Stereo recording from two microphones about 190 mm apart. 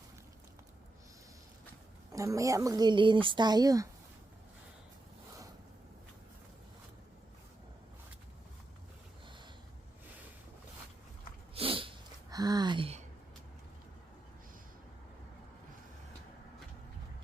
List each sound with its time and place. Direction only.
2.1 s speech: 15° right (ahead or behind)
11.5 s sniff: 30° right (ahead or behind)